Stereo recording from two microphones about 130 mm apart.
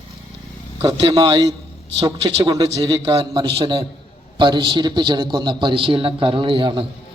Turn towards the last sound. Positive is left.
turn(degrees=-40)  # may be behind; listen again after turning